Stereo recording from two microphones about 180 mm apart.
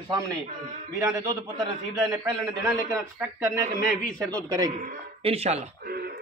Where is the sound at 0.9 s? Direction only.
20° right (ahead or behind).